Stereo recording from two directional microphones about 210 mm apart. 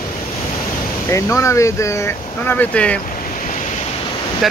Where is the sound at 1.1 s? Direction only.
15° left (ahead or behind).